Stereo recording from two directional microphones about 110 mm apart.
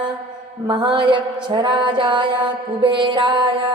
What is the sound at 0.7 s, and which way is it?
Music, 45° right (ahead or behind).